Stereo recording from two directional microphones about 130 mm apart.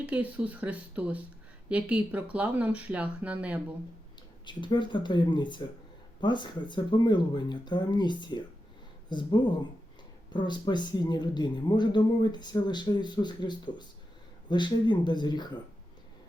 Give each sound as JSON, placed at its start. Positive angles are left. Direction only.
{"t": 0.0, "sound": "speech", "side_deg": -10}
{"t": 4.4, "sound": "speech", "side_deg": 35}